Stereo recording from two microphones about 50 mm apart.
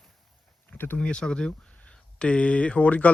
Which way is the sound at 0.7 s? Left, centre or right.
Left.